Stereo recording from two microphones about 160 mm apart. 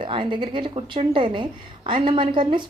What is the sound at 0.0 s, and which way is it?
A woman's voice, 30° right (ahead or behind).